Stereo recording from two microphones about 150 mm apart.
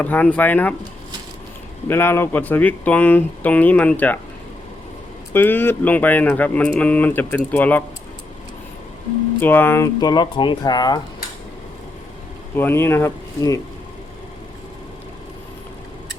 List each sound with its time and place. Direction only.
0.0 s speech: 10° left (ahead or behind)
1.9 s speech: 15° left (ahead or behind)
5.3 s speech: 15° left (ahead or behind)
9.4 s speech: 15° left (ahead or behind)
12.5 s speech: 15° left (ahead or behind)